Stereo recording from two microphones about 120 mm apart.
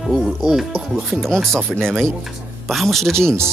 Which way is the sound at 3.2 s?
20° right (ahead or behind).